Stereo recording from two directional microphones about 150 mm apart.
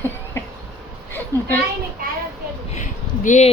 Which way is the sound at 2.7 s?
55° left (ahead or behind).